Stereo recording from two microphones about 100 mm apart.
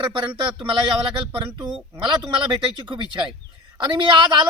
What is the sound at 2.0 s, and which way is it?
A man's voice, 55° right (ahead or behind).